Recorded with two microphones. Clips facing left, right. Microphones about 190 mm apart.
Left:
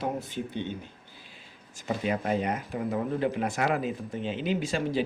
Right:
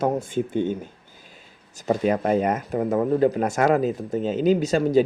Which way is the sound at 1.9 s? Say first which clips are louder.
Right 7 dB; 45° right (ahead or behind).